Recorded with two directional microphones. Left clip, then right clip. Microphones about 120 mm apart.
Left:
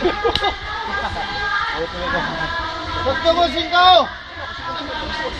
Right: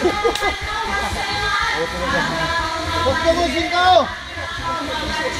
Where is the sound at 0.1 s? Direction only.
35° right (ahead or behind).